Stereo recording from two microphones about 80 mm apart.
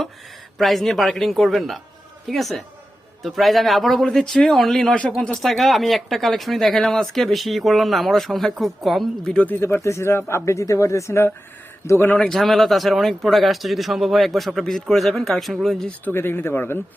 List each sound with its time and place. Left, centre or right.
0.6 s speech: centre
9.5 s speech: left
12.0 s a man's voice: centre
12.3 s speech: centre
16.1 s speech: left